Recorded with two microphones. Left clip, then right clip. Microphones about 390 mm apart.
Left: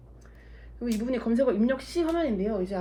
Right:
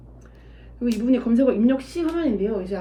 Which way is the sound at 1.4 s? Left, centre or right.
Centre.